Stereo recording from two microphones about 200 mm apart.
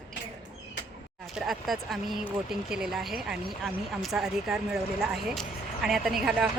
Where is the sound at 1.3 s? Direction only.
Centre (ahead or behind).